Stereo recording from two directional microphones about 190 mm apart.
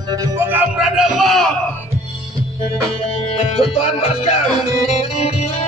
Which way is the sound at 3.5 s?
35° left (ahead or behind).